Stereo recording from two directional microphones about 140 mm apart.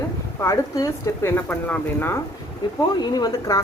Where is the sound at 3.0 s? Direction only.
30° left (ahead or behind).